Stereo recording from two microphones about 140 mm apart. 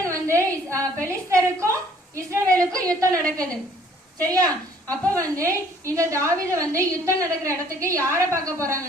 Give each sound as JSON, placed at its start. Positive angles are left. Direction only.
{"t": 0.0, "sound": "a sound", "side_deg": -20}
{"t": 1.3, "sound": "a woman's voice", "side_deg": -20}
{"t": 3.2, "sound": "a woman's voice", "side_deg": 5}
{"t": 4.2, "sound": "a woman's voice", "side_deg": -25}